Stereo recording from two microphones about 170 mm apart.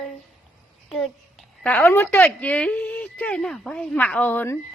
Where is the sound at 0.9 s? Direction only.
Centre (ahead or behind).